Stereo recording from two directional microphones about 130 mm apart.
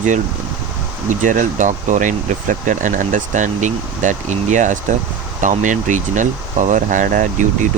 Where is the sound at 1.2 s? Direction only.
85° right.